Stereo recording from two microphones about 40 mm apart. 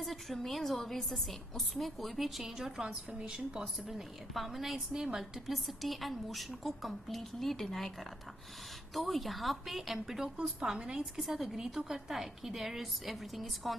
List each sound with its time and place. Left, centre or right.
0.0 s a woman's voice: centre
2.8 s a woman's voice: right
3.8 s a woman's voice: centre
4.9 s a woman's voice: centre
5.5 s a woman's voice: centre
8.9 s a woman's voice: centre